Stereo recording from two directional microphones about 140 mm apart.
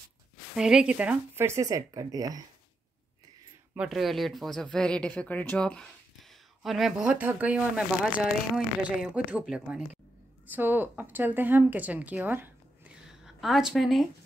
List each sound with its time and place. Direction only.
0.6 s speech: 5° right (ahead or behind); by 2.4 s 25° right (ahead or behind)
3.7 s speech: 5° right (ahead or behind)
13.2 s speech: centre (ahead or behind)